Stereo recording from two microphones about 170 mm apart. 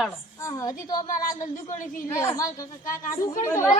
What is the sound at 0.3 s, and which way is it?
Speech, 20° left (ahead or behind).